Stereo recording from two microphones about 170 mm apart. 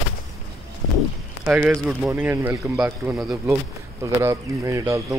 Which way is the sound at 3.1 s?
Centre (ahead or behind).